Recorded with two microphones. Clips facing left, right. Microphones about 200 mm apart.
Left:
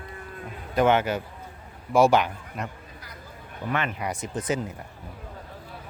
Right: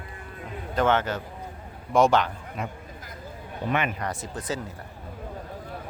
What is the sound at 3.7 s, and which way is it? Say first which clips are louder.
Speech: right 2 dB; 15° right (ahead or behind).